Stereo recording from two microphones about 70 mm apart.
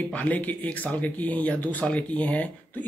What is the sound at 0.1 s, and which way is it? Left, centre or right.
Speech, left.